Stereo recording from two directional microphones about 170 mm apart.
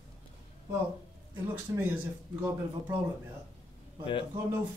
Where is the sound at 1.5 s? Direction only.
10° right (ahead or behind).